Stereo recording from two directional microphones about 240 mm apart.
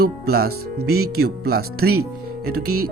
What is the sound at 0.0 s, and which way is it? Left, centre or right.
Speech, right.